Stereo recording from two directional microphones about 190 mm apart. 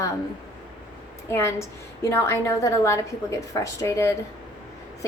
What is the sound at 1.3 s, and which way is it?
A woman's voice, 15° left (ahead or behind).